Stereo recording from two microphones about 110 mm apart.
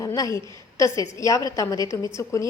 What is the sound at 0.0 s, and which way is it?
A woman's voice, 30° left (ahead or behind).